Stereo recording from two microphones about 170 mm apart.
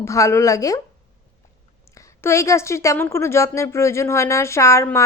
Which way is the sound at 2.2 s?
15° left (ahead or behind).